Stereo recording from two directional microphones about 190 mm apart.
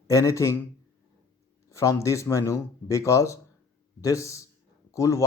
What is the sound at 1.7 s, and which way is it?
Speech, 15° left (ahead or behind).